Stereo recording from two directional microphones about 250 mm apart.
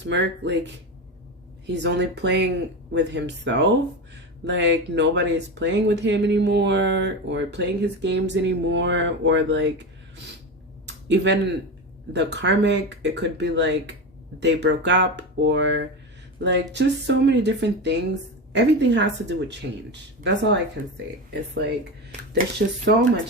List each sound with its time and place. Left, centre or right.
0.1 s speech: right
10.8 s speech: right
22.3 s speech: right